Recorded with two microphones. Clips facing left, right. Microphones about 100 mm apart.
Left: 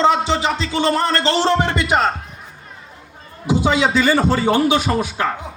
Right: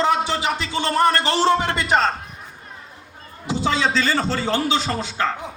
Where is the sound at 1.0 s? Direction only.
15° right (ahead or behind).